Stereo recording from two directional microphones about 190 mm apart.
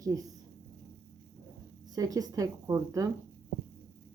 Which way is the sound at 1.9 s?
20° right (ahead or behind).